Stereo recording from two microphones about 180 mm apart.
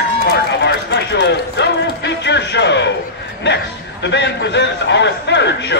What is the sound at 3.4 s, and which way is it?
A man's voice, 75° left (ahead or behind).